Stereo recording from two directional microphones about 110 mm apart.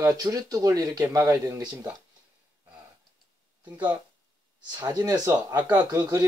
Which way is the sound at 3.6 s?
15° right (ahead or behind).